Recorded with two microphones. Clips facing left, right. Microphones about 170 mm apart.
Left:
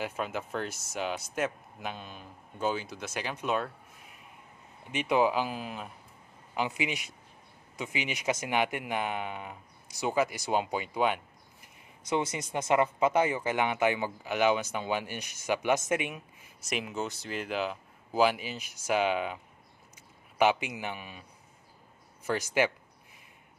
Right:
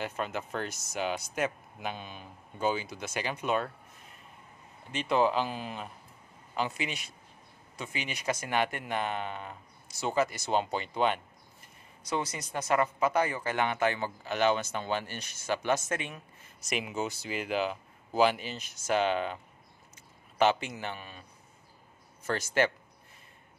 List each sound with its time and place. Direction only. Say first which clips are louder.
0.0 s speech: even; 5° left (ahead or behind)
6.5 s speech: left 2 dB; 15° left (ahead or behind)
11.6 s speech: left 2 dB; 20° left (ahead or behind)